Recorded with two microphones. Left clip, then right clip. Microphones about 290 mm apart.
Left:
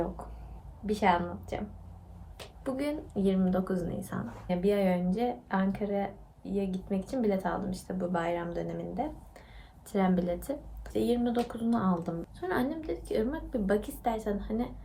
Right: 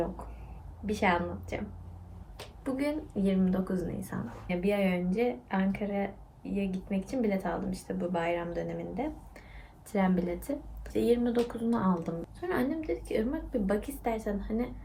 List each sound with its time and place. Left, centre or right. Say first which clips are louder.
0.9 s a woman's voice: left 1 dB; centre
2.6 s a woman's voice: right 1 dB; centre